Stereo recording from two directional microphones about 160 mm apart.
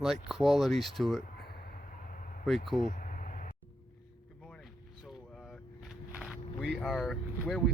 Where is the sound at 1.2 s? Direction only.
55° left (ahead or behind).